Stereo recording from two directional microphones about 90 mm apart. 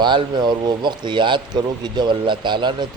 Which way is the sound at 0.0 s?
60° right (ahead or behind).